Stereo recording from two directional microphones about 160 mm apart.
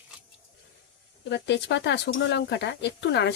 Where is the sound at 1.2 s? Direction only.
90° left.